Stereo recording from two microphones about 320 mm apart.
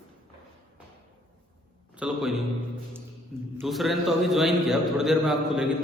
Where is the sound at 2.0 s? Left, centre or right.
Centre.